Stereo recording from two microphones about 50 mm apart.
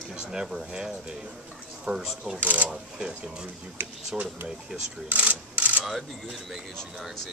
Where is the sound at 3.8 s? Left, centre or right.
Right.